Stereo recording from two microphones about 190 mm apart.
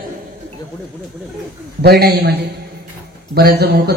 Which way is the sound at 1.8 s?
55° right (ahead or behind).